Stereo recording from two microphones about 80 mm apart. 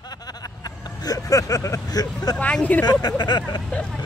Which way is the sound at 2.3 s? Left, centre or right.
Centre.